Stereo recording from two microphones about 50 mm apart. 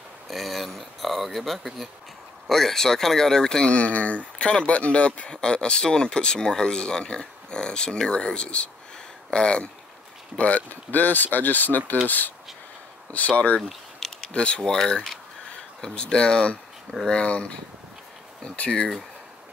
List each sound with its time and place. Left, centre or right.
0.3 s speech: centre; by 13.3 s left
13.6 s a sound: centre
14.3 s speech: left
14.6 s speech: centre
18.6 s speech: centre